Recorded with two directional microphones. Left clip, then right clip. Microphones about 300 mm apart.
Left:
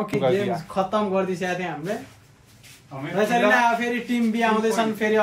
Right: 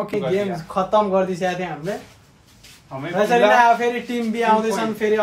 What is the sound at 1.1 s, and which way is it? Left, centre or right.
Speech, centre.